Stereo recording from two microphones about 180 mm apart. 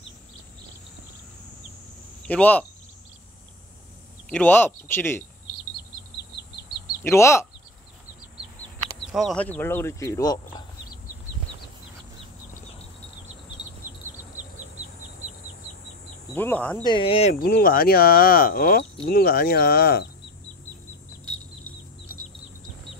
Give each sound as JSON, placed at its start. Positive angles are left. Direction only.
{"t": 2.2, "sound": "speech", "side_deg": 10}
{"t": 4.3, "sound": "speech", "side_deg": 10}
{"t": 7.0, "sound": "speech", "side_deg": 15}
{"t": 9.1, "sound": "speech", "side_deg": 0}
{"t": 13.8, "sound": "insect", "side_deg": -45}
{"t": 16.3, "sound": "speech", "side_deg": 10}
{"t": 16.8, "sound": "speech", "side_deg": 30}
{"t": 17.4, "sound": "speech", "side_deg": 55}